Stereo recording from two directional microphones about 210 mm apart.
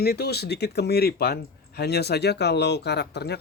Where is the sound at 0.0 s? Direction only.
50° left (ahead or behind).